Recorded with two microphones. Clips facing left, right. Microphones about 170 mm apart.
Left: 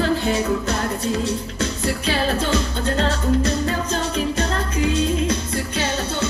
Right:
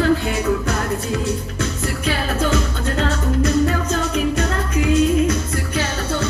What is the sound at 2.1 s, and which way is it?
Music, 30° left (ahead or behind).